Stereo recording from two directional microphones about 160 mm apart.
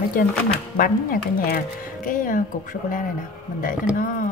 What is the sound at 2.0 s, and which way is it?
Speech, 55° left (ahead or behind).